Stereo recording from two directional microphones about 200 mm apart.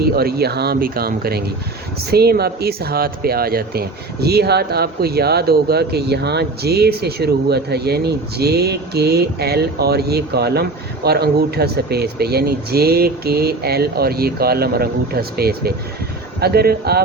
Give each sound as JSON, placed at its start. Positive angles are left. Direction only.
{"t": 0.0, "sound": "speech", "side_deg": -50}